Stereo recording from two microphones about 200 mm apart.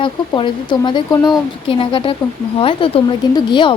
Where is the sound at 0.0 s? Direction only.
25° left (ahead or behind).